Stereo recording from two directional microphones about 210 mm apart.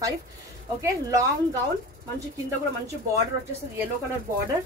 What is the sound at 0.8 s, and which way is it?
Speech, 15° right (ahead or behind).